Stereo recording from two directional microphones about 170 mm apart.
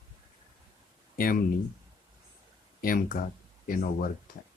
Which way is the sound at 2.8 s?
55° left (ahead or behind).